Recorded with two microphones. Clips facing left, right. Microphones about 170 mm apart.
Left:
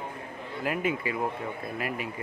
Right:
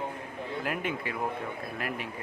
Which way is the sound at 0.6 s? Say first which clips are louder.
Left 5 dB; centre (ahead or behind).